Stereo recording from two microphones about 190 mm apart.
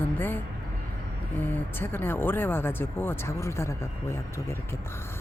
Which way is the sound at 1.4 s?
10° left (ahead or behind).